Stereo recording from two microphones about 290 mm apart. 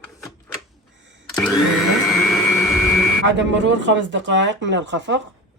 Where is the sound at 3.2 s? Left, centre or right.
Right.